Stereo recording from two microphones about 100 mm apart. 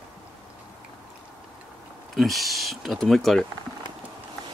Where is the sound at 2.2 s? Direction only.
Centre (ahead or behind).